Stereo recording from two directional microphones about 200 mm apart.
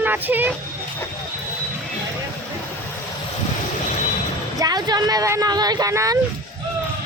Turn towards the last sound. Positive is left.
turn(degrees=-15)  # may be behind; listen again after turning